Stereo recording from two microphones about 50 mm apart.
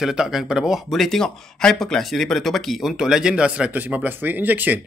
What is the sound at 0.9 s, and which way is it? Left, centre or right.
Speech, centre.